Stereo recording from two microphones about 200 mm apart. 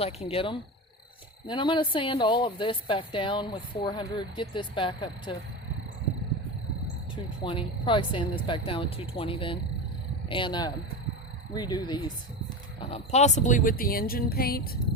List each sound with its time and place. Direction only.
0.0 s speech: 30° left (ahead or behind)
7.4 s speech: 25° left (ahead or behind)
12.8 s speech: 30° left (ahead or behind); by 14.8 s 50° left (ahead or behind)